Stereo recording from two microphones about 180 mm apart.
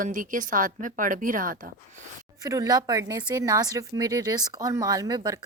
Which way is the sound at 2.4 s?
20° right (ahead or behind).